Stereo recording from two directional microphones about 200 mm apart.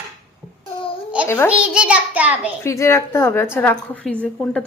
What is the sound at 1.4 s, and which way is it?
A child's voice, 5° right (ahead or behind).